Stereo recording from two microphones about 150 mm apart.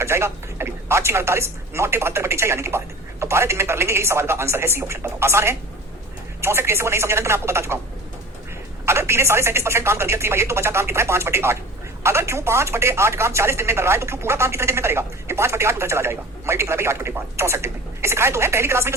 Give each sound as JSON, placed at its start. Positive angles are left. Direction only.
{"t": 0.0, "sound": "speech", "side_deg": -15}
{"t": 8.9, "sound": "speech", "side_deg": -15}